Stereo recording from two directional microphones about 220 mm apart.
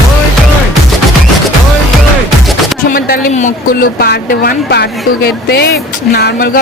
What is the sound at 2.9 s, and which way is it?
A woman's voice, 45° left (ahead or behind).